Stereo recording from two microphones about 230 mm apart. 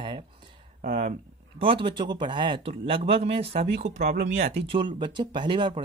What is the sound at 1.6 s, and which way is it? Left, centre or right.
Speech, right.